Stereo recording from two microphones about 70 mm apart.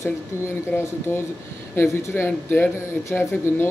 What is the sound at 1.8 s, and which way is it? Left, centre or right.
Speech, left.